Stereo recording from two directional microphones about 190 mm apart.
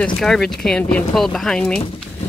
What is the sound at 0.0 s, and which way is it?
Speech, 5° left (ahead or behind).